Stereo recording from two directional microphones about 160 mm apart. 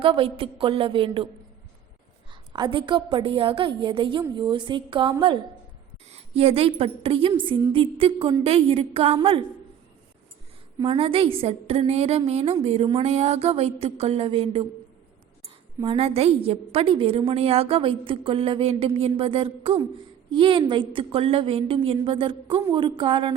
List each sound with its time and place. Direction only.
0.0 s a woman's voice: 35° right (ahead or behind)
2.3 s a woman's voice: 30° right (ahead or behind)
10.8 s a woman's voice: 35° right (ahead or behind)
15.8 s a woman's voice: 35° right (ahead or behind)